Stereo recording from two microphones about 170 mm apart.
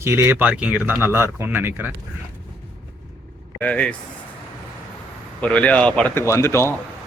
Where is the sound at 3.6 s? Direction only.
10° left (ahead or behind).